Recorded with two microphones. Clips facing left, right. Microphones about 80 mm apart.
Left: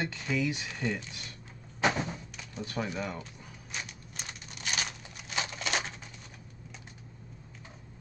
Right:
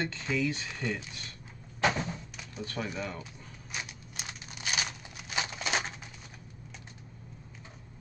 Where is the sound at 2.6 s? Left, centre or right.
Centre.